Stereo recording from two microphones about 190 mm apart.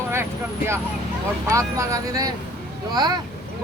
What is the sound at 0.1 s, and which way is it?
Speech, 10° right (ahead or behind).